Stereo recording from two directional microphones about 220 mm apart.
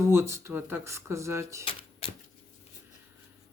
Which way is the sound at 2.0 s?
25° left (ahead or behind).